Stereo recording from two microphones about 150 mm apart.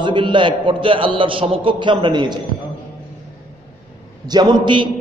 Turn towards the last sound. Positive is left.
turn(degrees=-30)  # may be behind; listen again after turning